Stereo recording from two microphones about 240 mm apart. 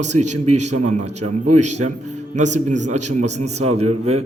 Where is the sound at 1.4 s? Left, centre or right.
Right.